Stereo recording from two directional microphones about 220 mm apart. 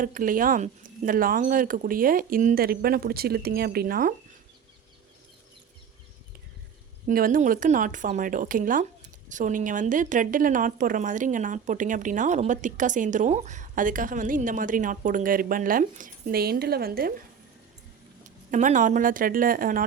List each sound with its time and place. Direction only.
0.0 s speech: 40° right (ahead or behind)
7.1 s speech: 40° right (ahead or behind)
18.2 s speech: 35° right (ahead or behind)